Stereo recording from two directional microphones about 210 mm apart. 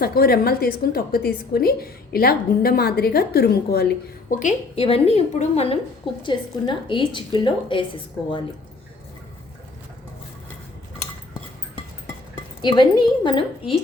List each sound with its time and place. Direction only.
0.0 s a woman's voice: 45° left (ahead or behind)
4.3 s a woman's voice: 35° left (ahead or behind)
12.6 s a woman's voice: 20° left (ahead or behind)